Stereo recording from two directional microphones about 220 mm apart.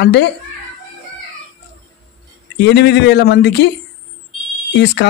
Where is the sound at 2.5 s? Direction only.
50° left (ahead or behind).